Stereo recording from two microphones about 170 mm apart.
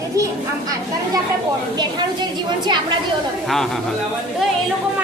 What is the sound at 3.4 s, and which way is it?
Speech, centre (ahead or behind).